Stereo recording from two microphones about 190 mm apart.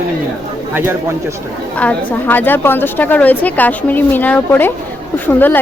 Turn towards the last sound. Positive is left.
turn(degrees=10)  # may be behind; listen again after turning